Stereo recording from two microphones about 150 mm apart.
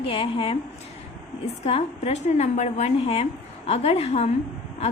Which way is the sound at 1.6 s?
45° left (ahead or behind).